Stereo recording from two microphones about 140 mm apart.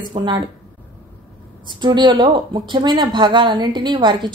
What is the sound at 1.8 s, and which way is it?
A woman's voice, 35° right (ahead or behind).